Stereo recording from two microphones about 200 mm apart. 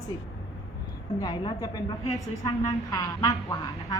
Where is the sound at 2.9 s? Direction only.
15° left (ahead or behind).